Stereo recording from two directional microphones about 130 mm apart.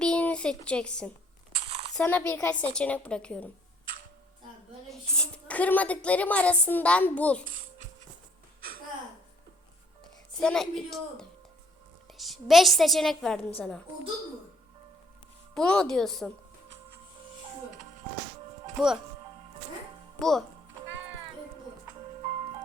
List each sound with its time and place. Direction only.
0.0 s a sound: 10° left (ahead or behind)
1.5 s a sound: 45° right (ahead or behind)
2.0 s a woman's voice: 10° left (ahead or behind)
4.9 s a woman's voice: 5° left (ahead or behind)
10.3 s a woman's voice: 5° left (ahead or behind)
15.5 s a woman's voice: 5° left (ahead or behind)
18.8 s a woman's voice: centre (ahead or behind)
20.1 s speech: 5° left (ahead or behind)